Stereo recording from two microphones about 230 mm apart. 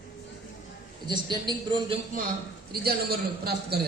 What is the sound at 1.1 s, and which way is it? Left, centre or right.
Speech, centre.